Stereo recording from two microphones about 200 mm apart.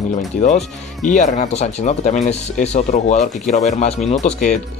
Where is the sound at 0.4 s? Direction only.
35° left (ahead or behind).